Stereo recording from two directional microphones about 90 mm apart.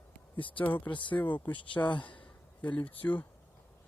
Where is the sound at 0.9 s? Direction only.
60° left (ahead or behind).